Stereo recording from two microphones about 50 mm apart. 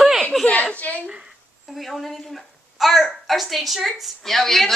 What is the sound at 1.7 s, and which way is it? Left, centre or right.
A woman's voice, centre.